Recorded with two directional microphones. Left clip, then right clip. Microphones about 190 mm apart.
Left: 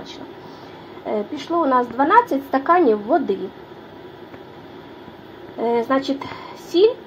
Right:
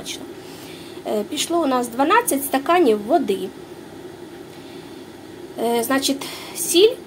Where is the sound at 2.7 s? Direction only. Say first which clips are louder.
Left 1 dB; 15° right (ahead or behind).